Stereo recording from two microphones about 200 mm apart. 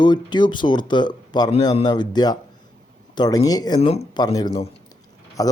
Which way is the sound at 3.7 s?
30° left (ahead or behind).